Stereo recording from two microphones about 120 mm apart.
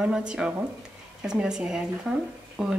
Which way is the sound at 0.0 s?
5° right (ahead or behind).